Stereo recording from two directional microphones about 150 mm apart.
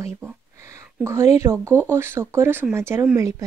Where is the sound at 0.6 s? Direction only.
20° right (ahead or behind).